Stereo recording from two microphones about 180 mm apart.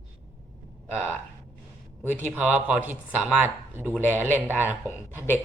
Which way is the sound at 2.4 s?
5° right (ahead or behind).